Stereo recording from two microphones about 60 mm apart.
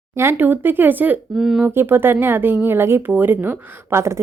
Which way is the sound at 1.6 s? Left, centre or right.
Right.